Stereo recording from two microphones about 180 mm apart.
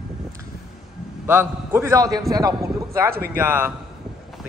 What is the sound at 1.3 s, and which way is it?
A man's voice, 10° right (ahead or behind).